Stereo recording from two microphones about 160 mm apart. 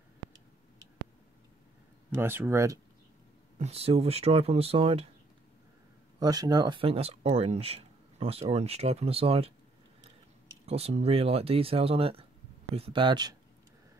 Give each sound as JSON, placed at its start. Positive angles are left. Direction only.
{"t": 2.0, "sound": "speech", "side_deg": -15}
{"t": 3.5, "sound": "speech", "side_deg": -40}
{"t": 6.1, "sound": "speech", "side_deg": -25}
{"t": 10.6, "sound": "speech", "side_deg": -40}